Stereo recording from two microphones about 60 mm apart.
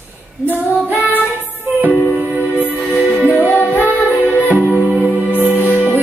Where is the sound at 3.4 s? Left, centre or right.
Left.